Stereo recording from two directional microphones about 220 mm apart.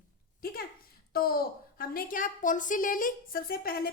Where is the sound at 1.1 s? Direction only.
45° left (ahead or behind).